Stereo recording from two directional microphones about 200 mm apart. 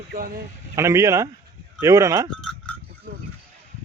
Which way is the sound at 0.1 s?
45° right (ahead or behind).